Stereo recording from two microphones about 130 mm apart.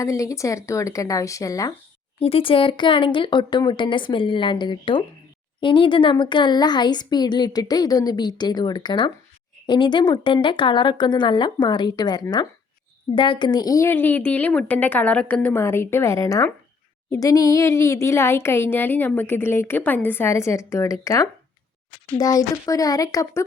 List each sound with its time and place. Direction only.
0.0 s speech: 25° left (ahead or behind)
2.1 s speech: 45° left (ahead or behind); by 23.4 s 25° left (ahead or behind)